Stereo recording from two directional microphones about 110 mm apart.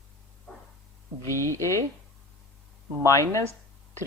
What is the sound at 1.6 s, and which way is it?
Speech, 25° left (ahead or behind).